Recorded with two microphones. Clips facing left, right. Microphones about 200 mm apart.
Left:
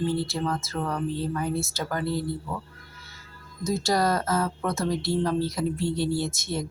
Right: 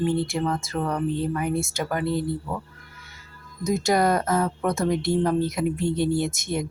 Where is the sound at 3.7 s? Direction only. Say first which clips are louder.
Right 3 dB; 20° right (ahead or behind).